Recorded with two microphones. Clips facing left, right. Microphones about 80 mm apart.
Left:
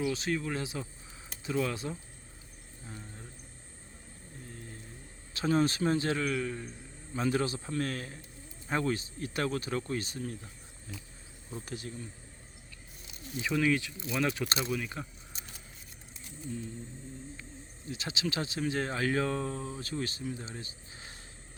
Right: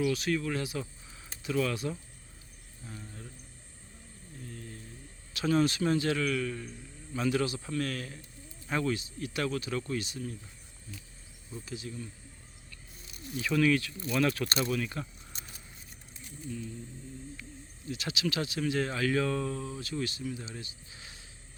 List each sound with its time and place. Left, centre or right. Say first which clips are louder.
0.0 s speech: right 2 dB; left
4.4 s vehicle: right 3 dB; left
5.3 s speech: right 1 dB; left
11.6 s speech: right 2 dB; left
13.3 s speech: right 2 dB; left
17.8 s speech: right 2 dB; left